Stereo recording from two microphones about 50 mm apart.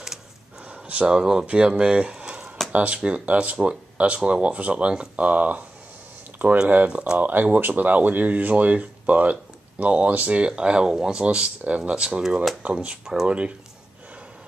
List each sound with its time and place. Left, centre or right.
0.7 s speech: right
6.9 s speech: right